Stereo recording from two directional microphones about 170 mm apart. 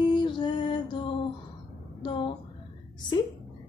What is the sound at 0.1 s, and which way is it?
Music, 25° left (ahead or behind).